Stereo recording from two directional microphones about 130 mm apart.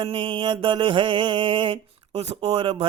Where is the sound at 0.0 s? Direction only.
45° right (ahead or behind).